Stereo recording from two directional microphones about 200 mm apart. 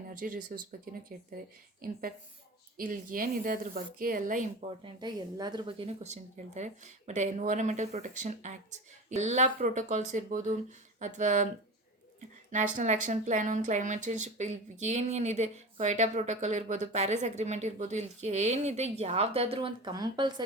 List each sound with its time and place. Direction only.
0.1 s a woman's voice: 40° right (ahead or behind)
4.8 s a woman's voice: 20° right (ahead or behind); by 11.4 s 40° right (ahead or behind)
12.5 s a woman's voice: 40° right (ahead or behind); by 20.4 s 20° right (ahead or behind)